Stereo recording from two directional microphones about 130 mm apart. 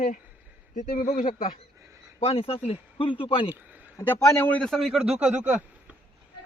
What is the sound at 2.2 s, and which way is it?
Speech, 50° left (ahead or behind).